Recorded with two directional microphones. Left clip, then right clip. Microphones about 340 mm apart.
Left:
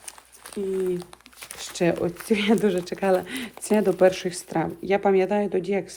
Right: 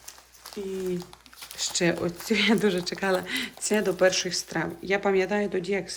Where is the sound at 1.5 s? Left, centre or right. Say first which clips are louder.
Left 2 dB; centre.